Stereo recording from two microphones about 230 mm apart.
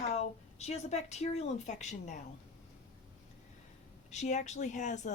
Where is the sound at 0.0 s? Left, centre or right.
Left.